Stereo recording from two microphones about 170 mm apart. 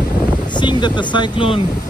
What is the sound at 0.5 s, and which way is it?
Speech, 25° left (ahead or behind).